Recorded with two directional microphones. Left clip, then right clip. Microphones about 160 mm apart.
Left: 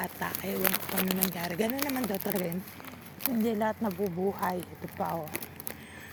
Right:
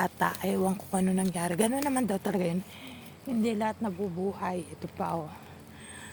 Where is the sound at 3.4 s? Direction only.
30° right (ahead or behind).